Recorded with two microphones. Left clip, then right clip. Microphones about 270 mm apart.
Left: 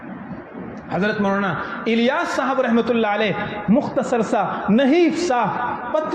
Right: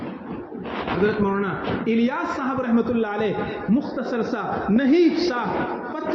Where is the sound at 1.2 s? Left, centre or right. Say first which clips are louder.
Left 3 dB; left.